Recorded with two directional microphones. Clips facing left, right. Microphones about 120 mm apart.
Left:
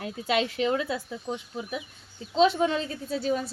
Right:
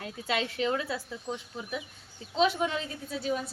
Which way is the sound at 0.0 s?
20° left (ahead or behind).